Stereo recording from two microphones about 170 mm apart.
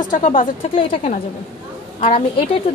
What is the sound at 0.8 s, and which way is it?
A woman's voice, 35° left (ahead or behind).